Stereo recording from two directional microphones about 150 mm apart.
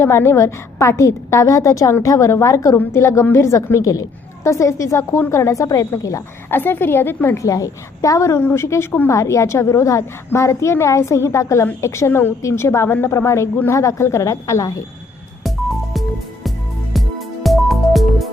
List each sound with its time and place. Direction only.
0.0 s a woman's voice: 15° left (ahead or behind)
15.4 s music: centre (ahead or behind)